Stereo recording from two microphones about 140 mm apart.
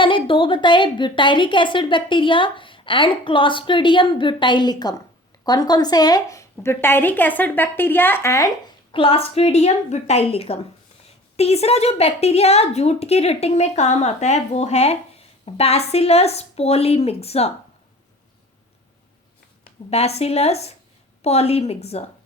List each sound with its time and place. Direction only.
0.0 s a woman's voice: 35° left (ahead or behind); by 8.4 s 20° left (ahead or behind)
8.9 s a woman's voice: 40° left (ahead or behind)
19.9 s a woman's voice: 50° left (ahead or behind)